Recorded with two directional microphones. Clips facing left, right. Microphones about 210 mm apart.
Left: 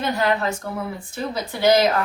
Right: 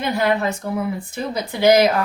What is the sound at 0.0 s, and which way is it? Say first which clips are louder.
A woman's voice: right 2 dB; 10° right (ahead or behind).